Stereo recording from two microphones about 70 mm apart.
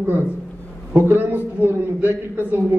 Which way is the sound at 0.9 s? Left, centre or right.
Right.